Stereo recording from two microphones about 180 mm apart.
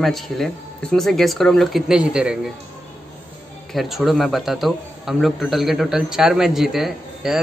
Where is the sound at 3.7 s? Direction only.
Centre (ahead or behind).